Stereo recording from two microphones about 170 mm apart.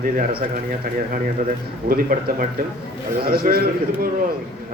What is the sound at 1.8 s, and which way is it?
A man's voice, 55° right (ahead or behind).